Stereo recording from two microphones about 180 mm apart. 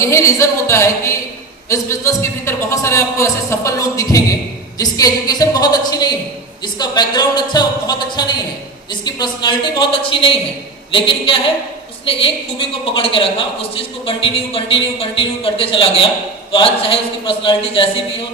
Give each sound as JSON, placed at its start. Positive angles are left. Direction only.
{"t": 0.0, "sound": "a man's voice", "side_deg": 15}